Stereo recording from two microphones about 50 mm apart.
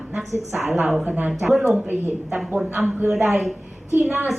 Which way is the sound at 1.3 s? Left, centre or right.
Centre.